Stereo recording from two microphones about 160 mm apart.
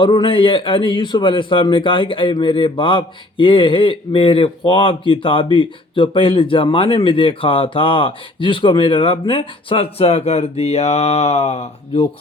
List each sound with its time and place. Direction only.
0.0 s a man's voice: 30° left (ahead or behind)